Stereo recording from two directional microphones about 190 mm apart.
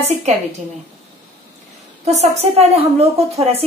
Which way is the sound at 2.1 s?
35° right (ahead or behind).